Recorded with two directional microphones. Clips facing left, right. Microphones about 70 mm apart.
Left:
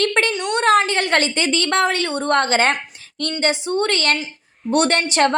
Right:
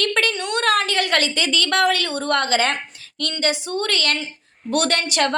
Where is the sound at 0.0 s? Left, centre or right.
Left.